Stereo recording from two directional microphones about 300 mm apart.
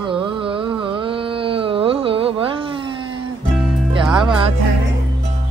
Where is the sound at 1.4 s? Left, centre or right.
Centre.